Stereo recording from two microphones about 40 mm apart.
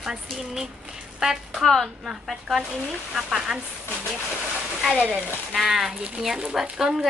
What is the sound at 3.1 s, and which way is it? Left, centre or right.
Speech, centre.